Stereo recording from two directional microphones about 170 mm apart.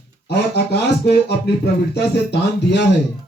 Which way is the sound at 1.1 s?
80° left.